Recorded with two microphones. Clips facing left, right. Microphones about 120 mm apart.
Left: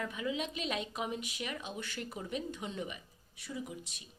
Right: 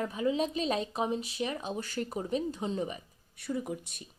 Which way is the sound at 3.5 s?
55° right (ahead or behind).